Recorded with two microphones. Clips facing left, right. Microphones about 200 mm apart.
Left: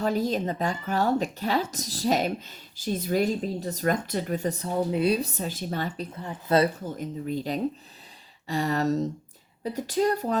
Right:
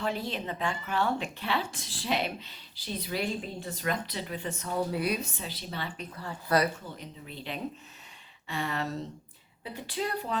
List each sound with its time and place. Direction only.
0.0 s speech: 40° left (ahead or behind)
4.7 s speech: 25° left (ahead or behind); by 6.1 s 45° left (ahead or behind)
6.1 s speech: 25° left (ahead or behind)
6.8 s speech: 45° left (ahead or behind)